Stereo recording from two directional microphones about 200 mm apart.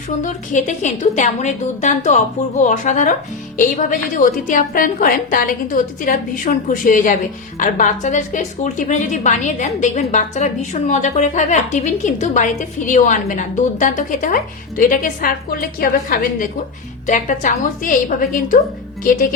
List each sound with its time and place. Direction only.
0.2 s a woman's voice: 40° left (ahead or behind)